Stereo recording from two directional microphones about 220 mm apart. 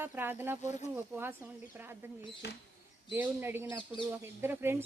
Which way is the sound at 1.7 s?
10° right (ahead or behind).